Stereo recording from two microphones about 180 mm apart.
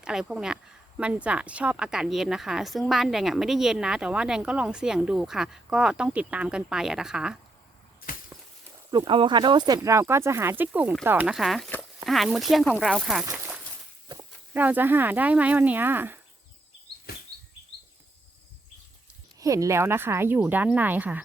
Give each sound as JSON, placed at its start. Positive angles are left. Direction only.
{"t": 0.0, "sound": "speech", "side_deg": -5}
{"t": 8.1, "sound": "a sound", "side_deg": 50}
{"t": 8.9, "sound": "speech", "side_deg": -25}
{"t": 13.3, "sound": "a sound", "side_deg": -10}
{"t": 14.1, "sound": "walk", "side_deg": -25}
{"t": 14.5, "sound": "speech", "side_deg": -10}
{"t": 19.4, "sound": "speech", "side_deg": -20}